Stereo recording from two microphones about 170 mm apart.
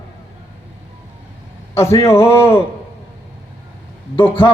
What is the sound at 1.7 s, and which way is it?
Speech, 15° left (ahead or behind).